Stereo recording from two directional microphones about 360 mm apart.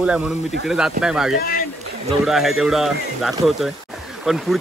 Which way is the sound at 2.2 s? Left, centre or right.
Centre.